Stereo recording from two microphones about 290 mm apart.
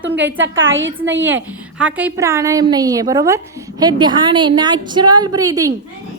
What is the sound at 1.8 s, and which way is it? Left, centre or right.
A woman's voice, centre.